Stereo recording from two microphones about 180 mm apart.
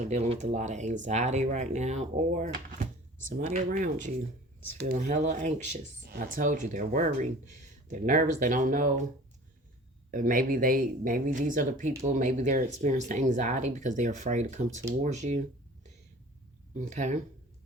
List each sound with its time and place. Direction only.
0.0 s speech: 40° right (ahead or behind)
6.1 s speech: 50° right (ahead or behind)
10.1 s speech: 50° right (ahead or behind)
16.7 s speech: 40° right (ahead or behind)